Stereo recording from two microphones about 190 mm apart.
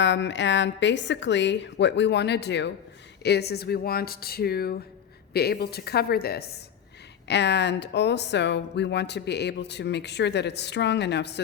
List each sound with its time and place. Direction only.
0.0 s a woman's voice: 70° left (ahead or behind)